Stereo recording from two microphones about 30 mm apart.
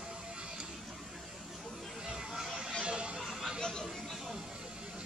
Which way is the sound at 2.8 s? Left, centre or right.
Right.